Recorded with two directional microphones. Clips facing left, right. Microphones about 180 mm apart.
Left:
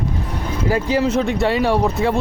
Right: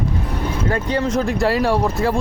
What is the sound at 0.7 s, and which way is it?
Speech, 5° left (ahead or behind).